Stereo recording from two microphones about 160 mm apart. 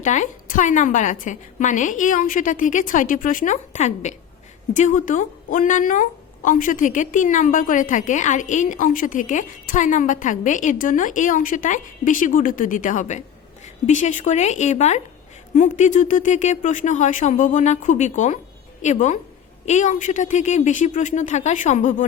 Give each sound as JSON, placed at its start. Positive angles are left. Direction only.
{"t": 0.0, "sound": "a woman's voice", "side_deg": 50}